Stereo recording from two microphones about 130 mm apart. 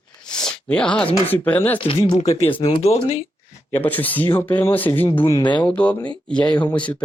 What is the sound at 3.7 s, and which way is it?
Speech, 15° left (ahead or behind).